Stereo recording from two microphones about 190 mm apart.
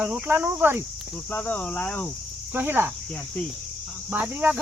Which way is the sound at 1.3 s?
10° left (ahead or behind).